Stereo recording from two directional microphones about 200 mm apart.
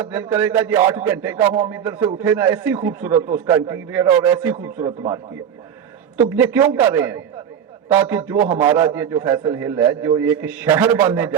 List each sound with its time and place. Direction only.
0.0 s a man's voice: 10° right (ahead or behind)
4.9 s a man's voice: 20° right (ahead or behind)
6.1 s a man's voice: 10° right (ahead or behind)